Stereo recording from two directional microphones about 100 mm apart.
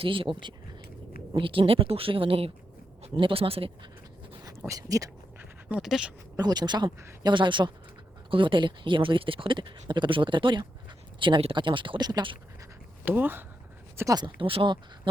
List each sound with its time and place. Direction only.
0.0 s a man's voice: 60° right (ahead or behind)
4.6 s speech: 35° right (ahead or behind)
5.4 s pant: 15° right (ahead or behind)
5.8 s speech: 5° right (ahead or behind)
6.3 s speech: 45° right (ahead or behind)
11.2 s speech: 65° right (ahead or behind)
11.5 s speech: 55° right (ahead or behind)
13.1 s speech: 20° right (ahead or behind)
14.2 s speech: 60° right (ahead or behind)